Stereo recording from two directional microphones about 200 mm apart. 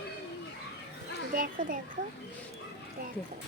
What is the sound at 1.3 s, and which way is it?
Speech, 45° right (ahead or behind).